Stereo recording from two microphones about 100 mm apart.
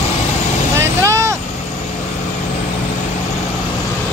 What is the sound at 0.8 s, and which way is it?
Vehicle, 30° right (ahead or behind).